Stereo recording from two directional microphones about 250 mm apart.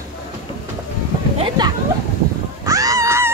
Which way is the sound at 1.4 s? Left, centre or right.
Centre.